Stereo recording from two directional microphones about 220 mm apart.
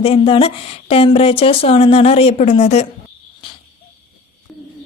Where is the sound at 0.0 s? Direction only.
25° left (ahead or behind).